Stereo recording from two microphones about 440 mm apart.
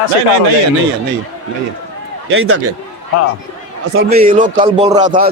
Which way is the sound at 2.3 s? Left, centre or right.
Right.